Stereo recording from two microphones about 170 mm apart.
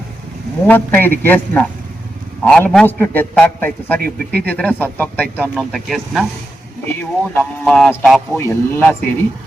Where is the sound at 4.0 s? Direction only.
65° right (ahead or behind).